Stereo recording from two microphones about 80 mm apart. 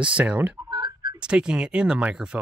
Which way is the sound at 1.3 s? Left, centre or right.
Centre.